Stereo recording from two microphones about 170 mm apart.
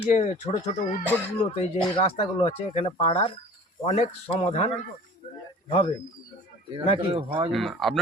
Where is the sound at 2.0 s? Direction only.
35° left (ahead or behind).